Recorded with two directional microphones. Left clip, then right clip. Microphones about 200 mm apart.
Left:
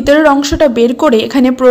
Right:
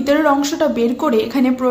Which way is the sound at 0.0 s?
35° left (ahead or behind).